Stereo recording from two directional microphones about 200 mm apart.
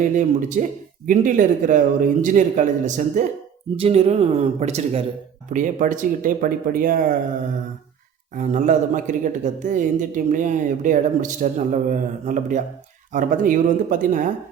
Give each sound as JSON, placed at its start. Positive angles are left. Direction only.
{"t": 0.0, "sound": "speech", "side_deg": -40}
{"t": 8.4, "sound": "speech", "side_deg": -40}